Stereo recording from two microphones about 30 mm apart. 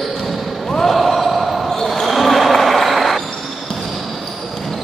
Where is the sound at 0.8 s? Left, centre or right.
Centre.